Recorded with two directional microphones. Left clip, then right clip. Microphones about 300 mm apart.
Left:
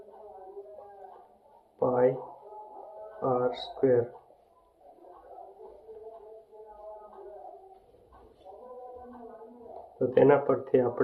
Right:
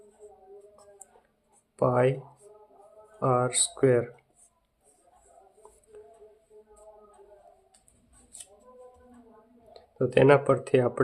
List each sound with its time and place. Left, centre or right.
1.8 s speech: right
3.2 s speech: right
10.2 s speech: right